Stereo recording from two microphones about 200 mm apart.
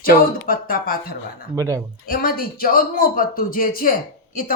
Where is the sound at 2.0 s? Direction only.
45° left (ahead or behind).